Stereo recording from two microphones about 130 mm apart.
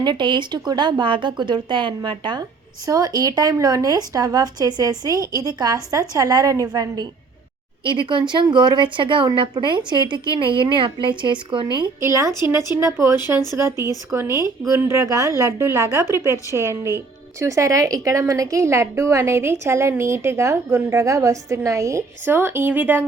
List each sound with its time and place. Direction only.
0.0 s a woman's voice: 35° right (ahead or behind)
11.9 s a woman's voice: 20° right (ahead or behind)